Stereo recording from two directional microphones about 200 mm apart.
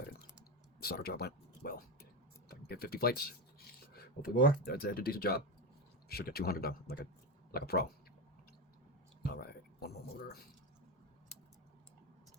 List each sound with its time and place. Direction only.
0.8 s speech: 50° left (ahead or behind)
9.3 s speech: 50° left (ahead or behind)